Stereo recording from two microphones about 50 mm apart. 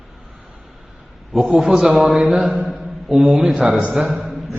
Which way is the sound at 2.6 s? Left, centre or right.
Centre.